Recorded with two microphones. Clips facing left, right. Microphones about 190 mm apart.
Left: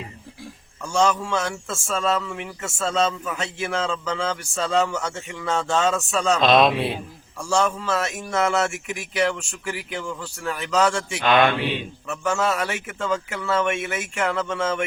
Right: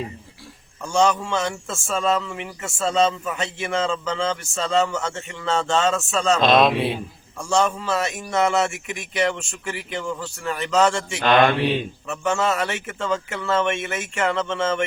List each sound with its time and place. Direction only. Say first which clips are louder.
0.9 s a man's voice: right 1 dB; centre (ahead or behind)
11.2 s mantra: right 2 dB; 40° right (ahead or behind)
12.0 s a man's voice: even; centre (ahead or behind)